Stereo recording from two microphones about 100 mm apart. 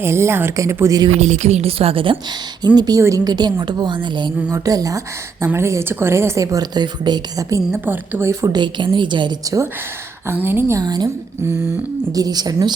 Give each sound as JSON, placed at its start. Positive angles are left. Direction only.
{"t": 0.0, "sound": "a woman's voice", "side_deg": -25}
{"t": 1.2, "sound": "speech", "side_deg": -80}
{"t": 2.6, "sound": "speech", "side_deg": -45}
{"t": 4.5, "sound": "speech", "side_deg": -35}
{"t": 7.5, "sound": "a woman's voice", "side_deg": -20}
{"t": 8.5, "sound": "speech", "side_deg": -50}
{"t": 10.4, "sound": "a woman's voice", "side_deg": -25}
{"t": 10.8, "sound": "speech", "side_deg": -40}
{"t": 12.1, "sound": "speech", "side_deg": -40}